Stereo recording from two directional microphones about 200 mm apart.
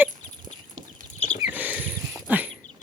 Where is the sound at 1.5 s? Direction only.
10° right (ahead or behind).